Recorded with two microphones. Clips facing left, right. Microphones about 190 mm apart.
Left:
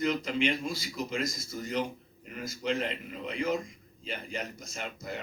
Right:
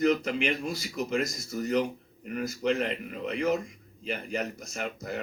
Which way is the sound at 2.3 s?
60° right (ahead or behind).